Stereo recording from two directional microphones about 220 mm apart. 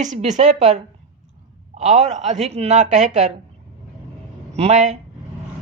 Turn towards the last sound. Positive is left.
turn(degrees=-30)  # may be behind; listen again after turning